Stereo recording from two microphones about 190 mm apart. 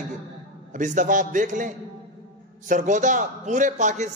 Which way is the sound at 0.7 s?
40° right (ahead or behind).